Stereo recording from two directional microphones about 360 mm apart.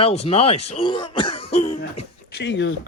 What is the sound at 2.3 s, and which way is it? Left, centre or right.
Speech, left.